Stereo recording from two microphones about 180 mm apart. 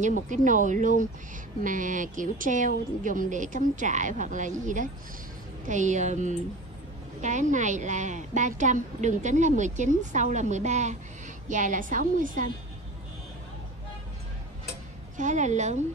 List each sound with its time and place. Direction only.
0.3 s a woman's voice: 45° right (ahead or behind)
15.1 s a woman's voice: 40° right (ahead or behind)